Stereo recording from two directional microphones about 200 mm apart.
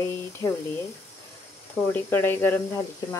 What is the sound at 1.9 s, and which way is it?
Speech, 10° left (ahead or behind).